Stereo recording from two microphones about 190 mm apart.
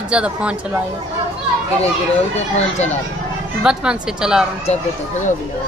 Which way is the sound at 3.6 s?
5° right (ahead or behind).